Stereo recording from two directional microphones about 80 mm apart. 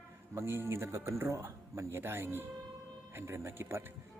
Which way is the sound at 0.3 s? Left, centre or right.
Right.